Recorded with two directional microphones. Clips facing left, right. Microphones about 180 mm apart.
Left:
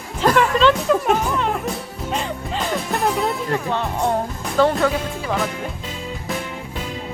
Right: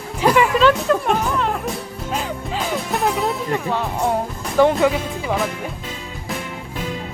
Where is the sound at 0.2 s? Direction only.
10° right (ahead or behind).